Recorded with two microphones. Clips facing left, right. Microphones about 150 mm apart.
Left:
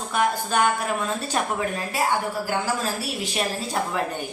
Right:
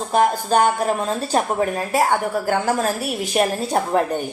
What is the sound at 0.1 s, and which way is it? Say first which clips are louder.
Speech: right 6 dB; 40° right (ahead or behind).